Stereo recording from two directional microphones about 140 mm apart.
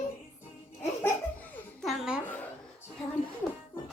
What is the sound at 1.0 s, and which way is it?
Laughter, 10° left (ahead or behind).